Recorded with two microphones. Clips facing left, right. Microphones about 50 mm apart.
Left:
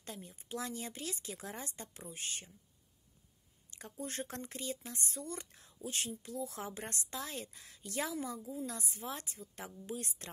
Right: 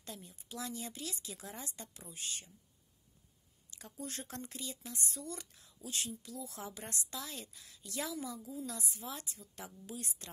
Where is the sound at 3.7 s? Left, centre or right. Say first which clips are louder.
Left 2 dB; left.